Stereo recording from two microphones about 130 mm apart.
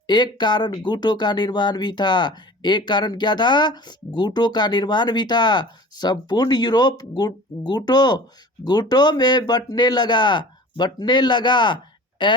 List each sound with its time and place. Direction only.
0.1 s speech: 35° left (ahead or behind)